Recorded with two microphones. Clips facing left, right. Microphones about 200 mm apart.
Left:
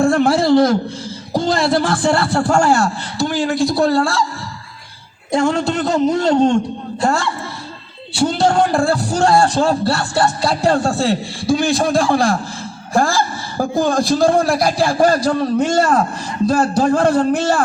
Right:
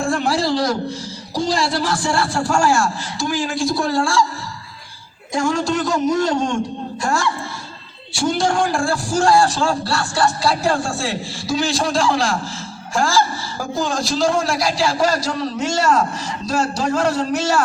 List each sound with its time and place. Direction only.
0.0 s a sound: 60° left (ahead or behind)
1.3 s a man's voice: 55° left (ahead or behind)
5.3 s a man's voice: 60° left (ahead or behind)
8.1 s a man's voice: 60° left (ahead or behind)
10.4 s a man's voice: 60° left (ahead or behind)